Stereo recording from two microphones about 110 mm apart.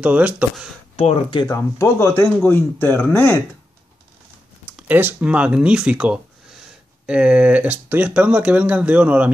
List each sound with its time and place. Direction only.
0.0 s speech: 10° right (ahead or behind)
1.5 s speech: 25° left (ahead or behind)
4.8 s speech: 15° right (ahead or behind)